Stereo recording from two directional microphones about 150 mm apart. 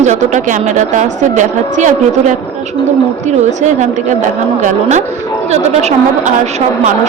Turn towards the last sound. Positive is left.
turn(degrees=-50)  # may be behind; listen again after turning